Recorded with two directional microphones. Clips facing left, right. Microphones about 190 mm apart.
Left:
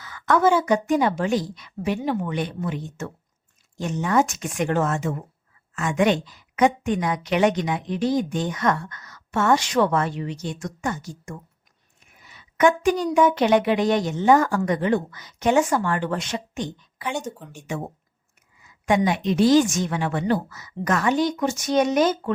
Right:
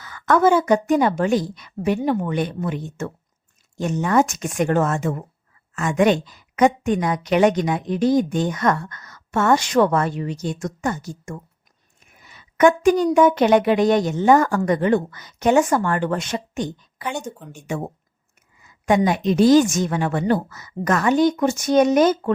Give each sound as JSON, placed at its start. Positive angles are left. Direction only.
{"t": 0.0, "sound": "a woman's voice", "side_deg": -50}
{"t": 12.5, "sound": "a woman's voice", "side_deg": -45}
{"t": 17.2, "sound": "speech", "side_deg": 0}
{"t": 17.5, "sound": "a woman's voice", "side_deg": -45}
{"t": 18.9, "sound": "a woman's voice", "side_deg": -40}